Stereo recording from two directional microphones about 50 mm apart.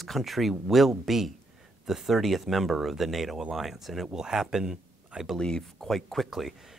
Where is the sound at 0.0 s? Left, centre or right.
Centre.